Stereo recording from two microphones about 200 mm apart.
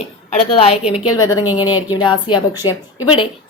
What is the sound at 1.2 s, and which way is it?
Speech, 15° left (ahead or behind).